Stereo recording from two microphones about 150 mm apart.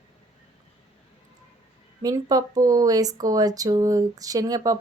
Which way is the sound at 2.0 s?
25° right (ahead or behind).